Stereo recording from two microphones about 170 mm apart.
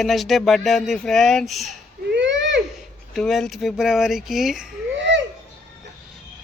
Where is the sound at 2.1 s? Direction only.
90° right.